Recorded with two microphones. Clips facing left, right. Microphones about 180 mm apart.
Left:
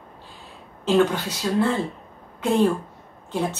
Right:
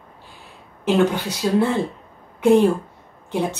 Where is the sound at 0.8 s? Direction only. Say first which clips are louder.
Right 1 dB; 15° right (ahead or behind).